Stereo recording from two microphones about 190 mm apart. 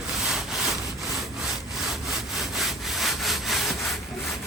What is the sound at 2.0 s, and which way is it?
Rub, centre (ahead or behind).